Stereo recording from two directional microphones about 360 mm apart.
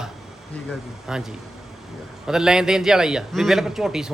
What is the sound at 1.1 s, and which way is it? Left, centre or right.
A man's voice, centre.